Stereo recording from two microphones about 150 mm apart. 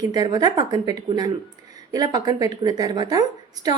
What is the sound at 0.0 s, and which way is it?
Speech, 25° right (ahead or behind).